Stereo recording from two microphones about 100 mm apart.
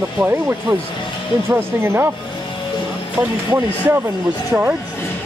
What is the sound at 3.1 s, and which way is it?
Speech, 20° right (ahead or behind).